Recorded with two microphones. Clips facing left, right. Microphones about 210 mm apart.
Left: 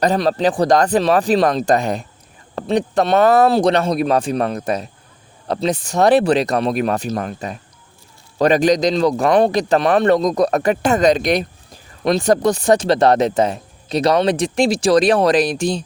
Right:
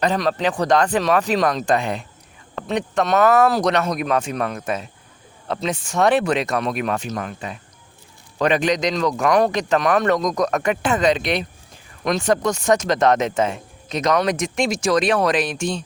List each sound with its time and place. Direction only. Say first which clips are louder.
0.0 s speech: left 4 dB; 35° left (ahead or behind)